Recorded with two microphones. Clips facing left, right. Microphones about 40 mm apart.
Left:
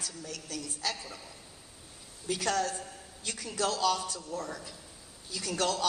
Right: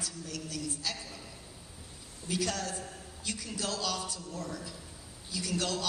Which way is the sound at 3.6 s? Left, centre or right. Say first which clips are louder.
Left 7 dB; centre.